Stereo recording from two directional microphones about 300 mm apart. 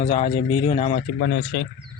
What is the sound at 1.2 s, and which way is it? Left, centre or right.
Speech, left.